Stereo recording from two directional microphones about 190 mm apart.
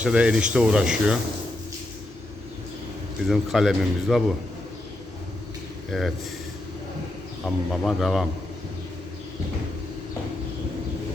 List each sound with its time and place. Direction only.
0.0 s speech: 5° right (ahead or behind)
3.2 s speech: centre (ahead or behind)
5.9 s speech: centre (ahead or behind)
7.4 s speech: centre (ahead or behind)